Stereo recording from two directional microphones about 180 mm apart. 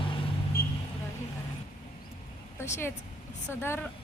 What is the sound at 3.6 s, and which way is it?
Speech, 15° left (ahead or behind).